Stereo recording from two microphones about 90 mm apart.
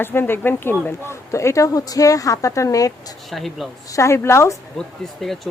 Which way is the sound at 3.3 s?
Centre (ahead or behind).